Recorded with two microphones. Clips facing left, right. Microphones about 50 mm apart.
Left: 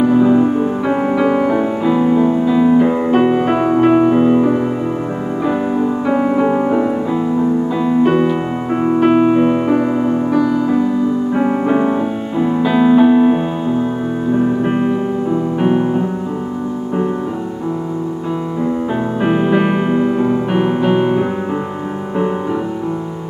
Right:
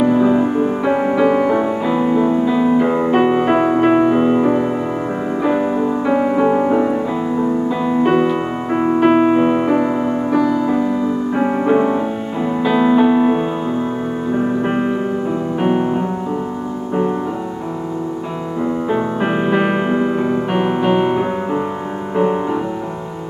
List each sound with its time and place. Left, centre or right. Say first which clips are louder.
0.0 s music: left 2 dB; centre
18.9 s music: left 1 dB; centre